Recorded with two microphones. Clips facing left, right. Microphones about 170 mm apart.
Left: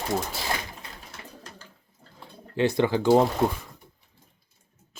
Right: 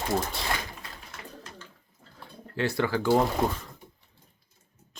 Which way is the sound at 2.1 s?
20° left (ahead or behind).